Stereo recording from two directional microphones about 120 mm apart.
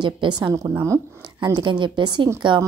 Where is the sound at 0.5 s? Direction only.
25° right (ahead or behind).